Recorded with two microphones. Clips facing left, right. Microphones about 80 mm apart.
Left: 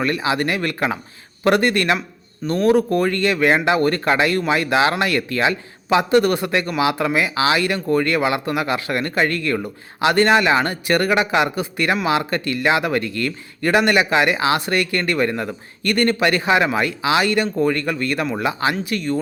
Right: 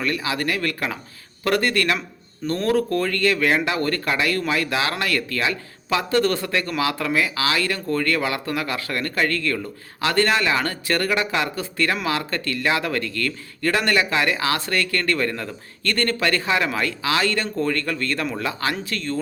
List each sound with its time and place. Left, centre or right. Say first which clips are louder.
0.0 s speech: left 4 dB; left